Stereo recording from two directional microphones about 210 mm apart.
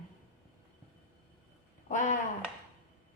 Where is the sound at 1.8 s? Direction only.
35° left (ahead or behind).